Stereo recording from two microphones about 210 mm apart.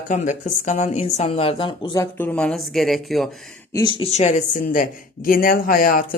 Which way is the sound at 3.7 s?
25° left (ahead or behind).